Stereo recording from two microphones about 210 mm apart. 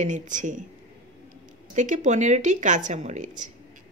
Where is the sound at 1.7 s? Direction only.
35° right (ahead or behind).